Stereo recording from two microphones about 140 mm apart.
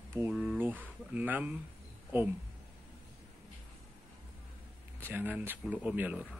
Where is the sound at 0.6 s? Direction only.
10° right (ahead or behind).